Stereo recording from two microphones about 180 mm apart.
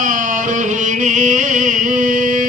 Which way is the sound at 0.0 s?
45° right (ahead or behind).